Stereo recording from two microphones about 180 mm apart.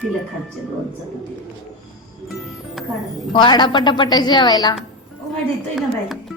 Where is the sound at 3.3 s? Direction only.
25° left (ahead or behind).